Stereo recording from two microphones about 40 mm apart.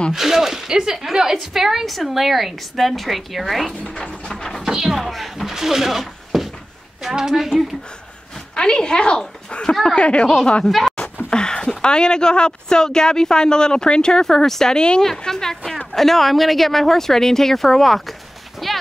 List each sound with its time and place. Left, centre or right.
0.1 s a woman's voice: centre
4.0 s a sound: centre
4.6 s speech: centre
5.5 s a sound: centre
7.0 s a woman's voice: centre
8.5 s speech: left
9.9 s speech: left
10.7 s speech: centre
11.2 s a sound: left
11.8 s speech: left
14.2 s a woman's voice: centre
18.6 s a sound: centre